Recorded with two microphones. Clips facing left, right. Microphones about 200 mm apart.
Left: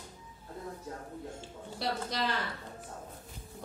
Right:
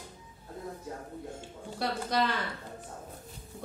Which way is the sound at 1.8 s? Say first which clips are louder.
Right 4 dB; 55° right (ahead or behind).